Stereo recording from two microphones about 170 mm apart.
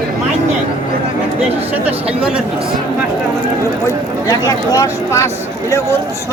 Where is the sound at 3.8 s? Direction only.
20° left (ahead or behind).